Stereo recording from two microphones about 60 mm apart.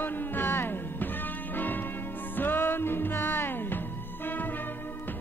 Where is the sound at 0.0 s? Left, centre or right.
Left.